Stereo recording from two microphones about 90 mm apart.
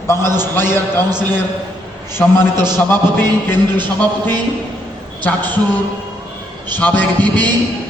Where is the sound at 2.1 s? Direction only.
25° left (ahead or behind).